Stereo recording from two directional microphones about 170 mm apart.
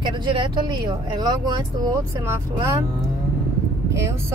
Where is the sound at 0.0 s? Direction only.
25° right (ahead or behind).